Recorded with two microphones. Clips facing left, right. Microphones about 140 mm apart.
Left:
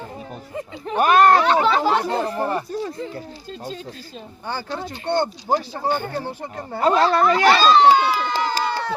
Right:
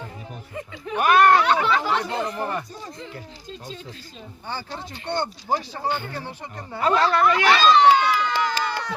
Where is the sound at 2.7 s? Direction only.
60° left (ahead or behind).